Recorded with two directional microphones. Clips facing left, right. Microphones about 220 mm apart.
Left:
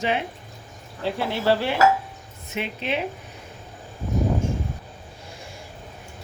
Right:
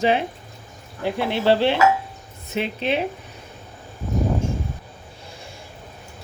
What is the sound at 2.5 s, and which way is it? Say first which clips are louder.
Speech: right 4 dB; 30° right (ahead or behind).